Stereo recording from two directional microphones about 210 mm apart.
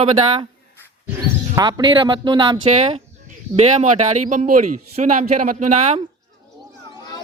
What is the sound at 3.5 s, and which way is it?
Speech, 35° right (ahead or behind).